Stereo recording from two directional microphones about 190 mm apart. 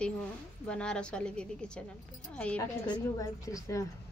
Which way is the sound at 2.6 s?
15° left (ahead or behind).